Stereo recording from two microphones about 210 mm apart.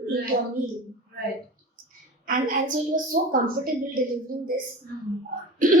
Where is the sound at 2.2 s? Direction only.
40° right (ahead or behind).